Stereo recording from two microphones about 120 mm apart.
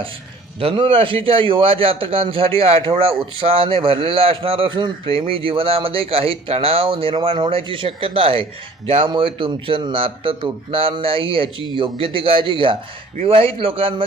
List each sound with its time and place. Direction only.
0.6 s speech: 50° right (ahead or behind)